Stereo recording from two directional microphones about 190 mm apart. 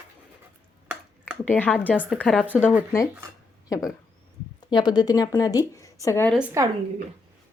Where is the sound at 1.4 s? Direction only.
10° left (ahead or behind).